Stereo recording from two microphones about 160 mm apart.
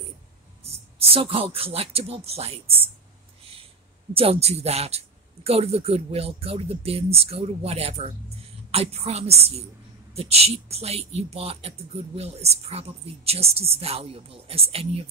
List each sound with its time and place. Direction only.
0.7 s speech: 35° right (ahead or behind)
4.1 s speech: 35° right (ahead or behind)